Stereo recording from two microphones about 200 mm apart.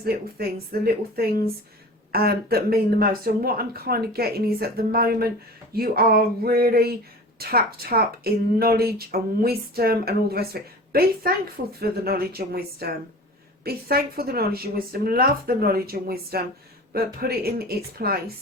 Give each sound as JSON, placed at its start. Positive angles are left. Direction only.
{"t": 0.0, "sound": "a woman's voice", "side_deg": -50}